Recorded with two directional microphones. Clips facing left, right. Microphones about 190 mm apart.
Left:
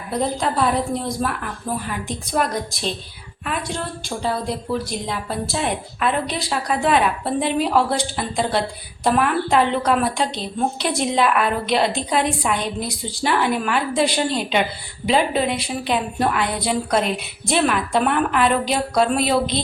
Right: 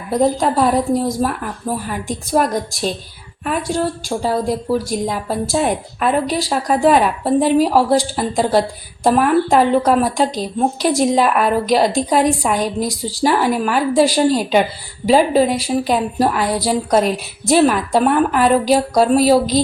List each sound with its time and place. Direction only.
0.1 s a woman's voice: 45° right (ahead or behind)